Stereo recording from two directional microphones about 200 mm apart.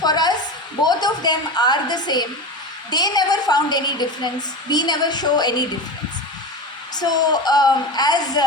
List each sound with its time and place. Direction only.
0.0 s a sound: 20° left (ahead or behind)
0.8 s a woman's voice: 20° left (ahead or behind)
6.9 s a woman's voice: 20° left (ahead or behind)